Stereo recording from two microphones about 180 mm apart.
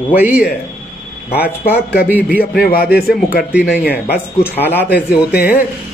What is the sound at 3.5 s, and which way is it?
Speech, 10° right (ahead or behind).